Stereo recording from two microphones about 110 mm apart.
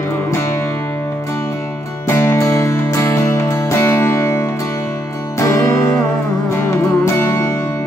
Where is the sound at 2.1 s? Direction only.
20° left (ahead or behind).